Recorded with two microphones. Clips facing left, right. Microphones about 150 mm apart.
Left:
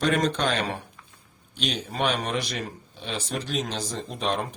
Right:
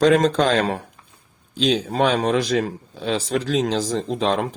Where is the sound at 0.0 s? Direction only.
90° right.